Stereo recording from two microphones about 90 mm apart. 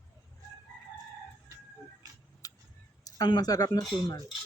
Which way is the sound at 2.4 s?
40° left (ahead or behind).